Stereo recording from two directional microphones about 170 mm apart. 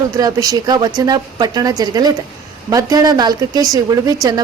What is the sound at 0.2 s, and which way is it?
A woman's voice, 20° right (ahead or behind).